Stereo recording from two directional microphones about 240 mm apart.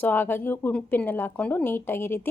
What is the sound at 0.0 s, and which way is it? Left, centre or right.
Speech, centre.